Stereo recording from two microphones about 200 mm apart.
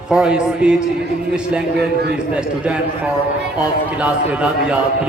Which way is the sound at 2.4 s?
5° right (ahead or behind).